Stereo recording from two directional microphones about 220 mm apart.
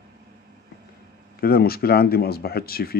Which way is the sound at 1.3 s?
45° left (ahead or behind).